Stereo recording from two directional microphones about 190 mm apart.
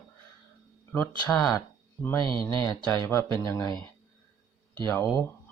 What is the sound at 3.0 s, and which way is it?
Speech, 15° left (ahead or behind).